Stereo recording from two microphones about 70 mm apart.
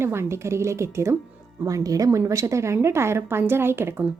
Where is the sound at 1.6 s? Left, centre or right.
Right.